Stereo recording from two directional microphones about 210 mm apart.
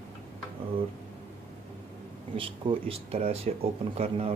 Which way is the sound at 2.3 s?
25° right (ahead or behind).